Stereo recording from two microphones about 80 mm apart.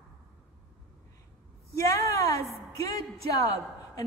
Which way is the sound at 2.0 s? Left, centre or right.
Left.